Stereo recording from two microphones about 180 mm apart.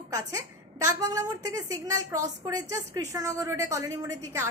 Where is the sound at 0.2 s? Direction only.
20° right (ahead or behind).